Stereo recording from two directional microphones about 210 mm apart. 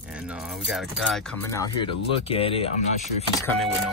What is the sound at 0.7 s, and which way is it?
Speech, centre (ahead or behind).